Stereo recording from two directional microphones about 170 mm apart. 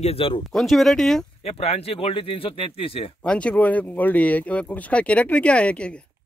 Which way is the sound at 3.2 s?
5° left (ahead or behind).